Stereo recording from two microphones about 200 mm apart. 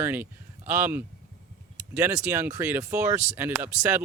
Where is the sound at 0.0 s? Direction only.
10° right (ahead or behind).